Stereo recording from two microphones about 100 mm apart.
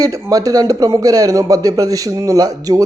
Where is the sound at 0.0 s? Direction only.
35° right (ahead or behind).